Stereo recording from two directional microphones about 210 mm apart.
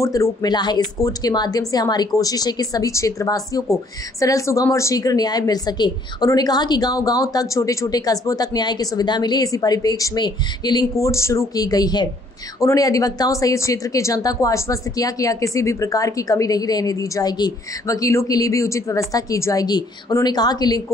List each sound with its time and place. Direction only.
0.0 s speech: 15° left (ahead or behind)